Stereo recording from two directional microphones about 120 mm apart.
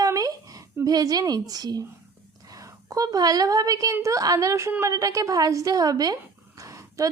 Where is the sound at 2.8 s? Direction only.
30° right (ahead or behind).